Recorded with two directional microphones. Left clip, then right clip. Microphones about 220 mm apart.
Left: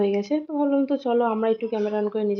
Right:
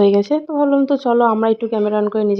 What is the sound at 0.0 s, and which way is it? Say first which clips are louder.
Speech: right 9 dB; 40° right (ahead or behind).